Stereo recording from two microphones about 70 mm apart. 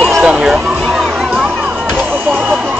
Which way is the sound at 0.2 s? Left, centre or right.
Centre.